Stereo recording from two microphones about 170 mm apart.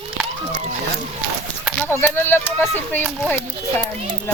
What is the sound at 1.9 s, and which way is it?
Speech, 15° left (ahead or behind).